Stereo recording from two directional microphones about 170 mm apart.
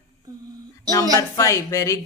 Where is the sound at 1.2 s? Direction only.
20° left (ahead or behind).